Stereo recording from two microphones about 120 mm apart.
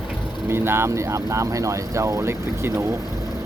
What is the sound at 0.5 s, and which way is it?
Speech, 20° right (ahead or behind).